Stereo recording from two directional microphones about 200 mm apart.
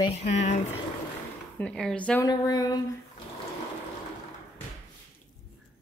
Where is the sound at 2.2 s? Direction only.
20° left (ahead or behind).